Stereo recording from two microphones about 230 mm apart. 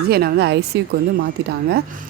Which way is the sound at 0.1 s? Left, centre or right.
Right.